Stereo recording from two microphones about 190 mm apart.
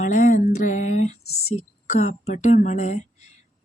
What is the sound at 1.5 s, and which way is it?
Speech, 35° left (ahead or behind).